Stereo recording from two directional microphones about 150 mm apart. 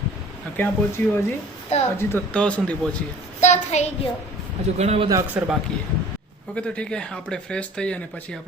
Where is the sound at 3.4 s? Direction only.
50° left (ahead or behind).